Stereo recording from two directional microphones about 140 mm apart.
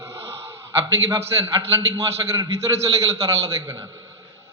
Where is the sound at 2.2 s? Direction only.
30° right (ahead or behind).